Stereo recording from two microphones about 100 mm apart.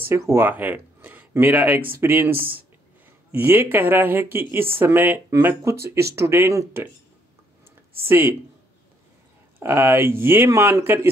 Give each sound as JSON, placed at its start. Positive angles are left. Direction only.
{"t": 0.1, "sound": "speech", "side_deg": -25}
{"t": 8.1, "sound": "speech", "side_deg": -20}
{"t": 9.6, "sound": "speech", "side_deg": -25}